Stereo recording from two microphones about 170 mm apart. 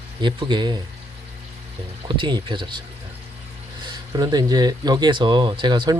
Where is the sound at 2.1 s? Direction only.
30° right (ahead or behind).